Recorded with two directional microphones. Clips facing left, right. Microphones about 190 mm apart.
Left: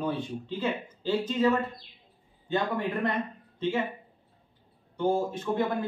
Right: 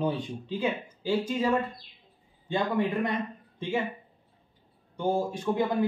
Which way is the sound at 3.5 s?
15° right (ahead or behind).